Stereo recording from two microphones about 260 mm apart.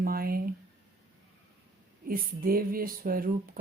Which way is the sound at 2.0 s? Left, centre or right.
Right.